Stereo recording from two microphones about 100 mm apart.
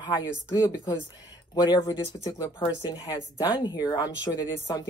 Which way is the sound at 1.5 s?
40° left (ahead or behind).